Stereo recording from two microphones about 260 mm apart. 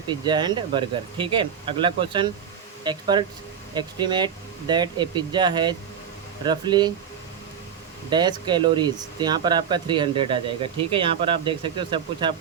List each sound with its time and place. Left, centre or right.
0.1 s speech: centre
8.1 s speech: centre